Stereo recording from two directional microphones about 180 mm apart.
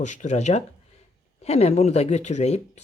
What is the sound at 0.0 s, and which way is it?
Speech, 40° left (ahead or behind).